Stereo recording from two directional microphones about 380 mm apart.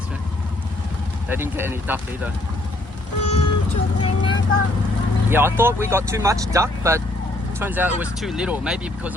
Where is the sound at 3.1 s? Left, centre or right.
Left.